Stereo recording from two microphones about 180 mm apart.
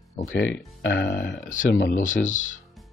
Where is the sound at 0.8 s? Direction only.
70° left (ahead or behind).